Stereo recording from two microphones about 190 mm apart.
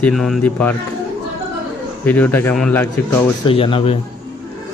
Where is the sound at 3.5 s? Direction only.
30° left (ahead or behind).